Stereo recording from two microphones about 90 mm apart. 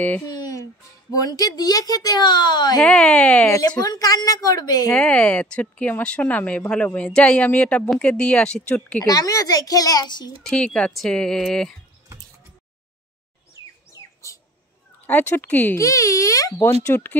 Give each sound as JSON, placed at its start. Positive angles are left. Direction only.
{"t": 0.3, "sound": "music", "side_deg": 40}
{"t": 1.1, "sound": "speech", "side_deg": 45}
{"t": 2.8, "sound": "speech", "side_deg": 10}
{"t": 3.8, "sound": "speech", "side_deg": 45}
{"t": 4.9, "sound": "speech", "side_deg": 10}
{"t": 9.0, "sound": "speech", "side_deg": 40}
{"t": 10.4, "sound": "speech", "side_deg": 10}
{"t": 15.0, "sound": "speech", "side_deg": 20}
{"t": 15.8, "sound": "a child's voice", "side_deg": 35}
{"t": 16.6, "sound": "speech", "side_deg": 25}